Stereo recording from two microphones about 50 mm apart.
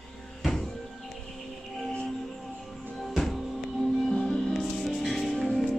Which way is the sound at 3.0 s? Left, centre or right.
Centre.